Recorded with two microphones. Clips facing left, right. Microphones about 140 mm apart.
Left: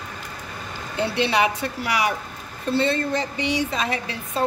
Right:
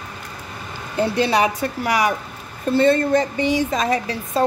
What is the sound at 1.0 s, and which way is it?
A woman's voice, 40° right (ahead or behind).